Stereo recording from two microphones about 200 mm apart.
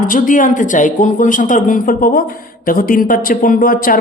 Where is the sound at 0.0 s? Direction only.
40° left (ahead or behind).